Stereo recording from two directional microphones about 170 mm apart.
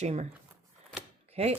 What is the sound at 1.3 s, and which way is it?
Speech, 40° right (ahead or behind).